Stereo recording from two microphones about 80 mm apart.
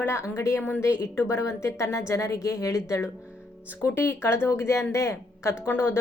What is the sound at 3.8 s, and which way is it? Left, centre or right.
Speech, left.